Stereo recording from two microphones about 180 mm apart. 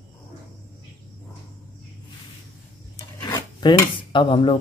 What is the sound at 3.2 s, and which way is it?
Dishes, 25° left (ahead or behind).